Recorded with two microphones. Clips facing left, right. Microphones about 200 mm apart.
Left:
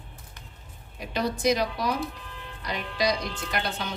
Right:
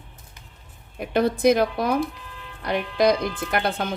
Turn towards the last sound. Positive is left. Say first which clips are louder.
# right 6 dB
turn(degrees=-55)  # may be behind; listen again after turning